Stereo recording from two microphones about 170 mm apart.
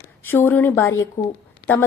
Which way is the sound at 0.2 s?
15° left (ahead or behind).